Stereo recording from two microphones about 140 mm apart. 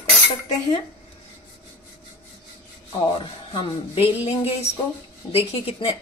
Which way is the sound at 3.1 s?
40° left (ahead or behind).